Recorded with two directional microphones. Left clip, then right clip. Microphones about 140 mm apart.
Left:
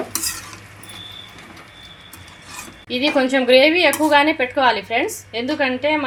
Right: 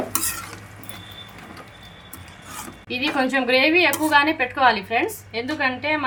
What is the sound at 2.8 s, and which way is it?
Speech, 80° left.